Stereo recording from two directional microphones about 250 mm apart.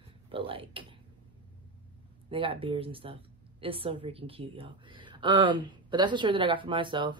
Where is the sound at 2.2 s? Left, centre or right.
Right.